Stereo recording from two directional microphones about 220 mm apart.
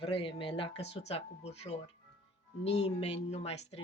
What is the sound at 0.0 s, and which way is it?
Speech, 25° left (ahead or behind).